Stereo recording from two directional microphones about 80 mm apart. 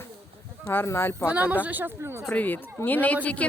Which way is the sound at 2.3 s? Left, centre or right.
Left.